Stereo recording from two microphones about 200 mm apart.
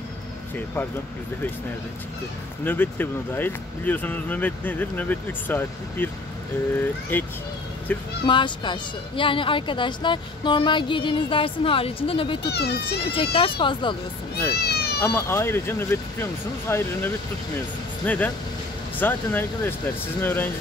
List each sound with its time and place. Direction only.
2.6 s speech: 10° left (ahead or behind)
7.1 s speech: 10° left (ahead or behind)
8.3 s a woman's voice: 25° left (ahead or behind)
12.4 s a child's voice: 55° left (ahead or behind)
13.1 s a woman's voice: 30° left (ahead or behind)
14.5 s cat: 55° left (ahead or behind)
15.0 s speech: 15° left (ahead or behind)